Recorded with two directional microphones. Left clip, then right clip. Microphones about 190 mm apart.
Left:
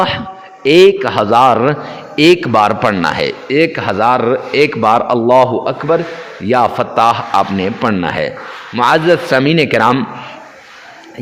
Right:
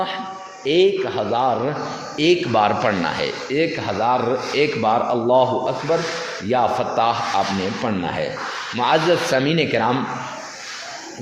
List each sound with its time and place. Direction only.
0.6 s a man's voice: 40° left (ahead or behind)